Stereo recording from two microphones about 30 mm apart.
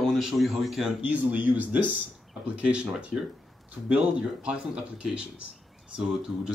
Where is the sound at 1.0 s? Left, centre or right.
Right.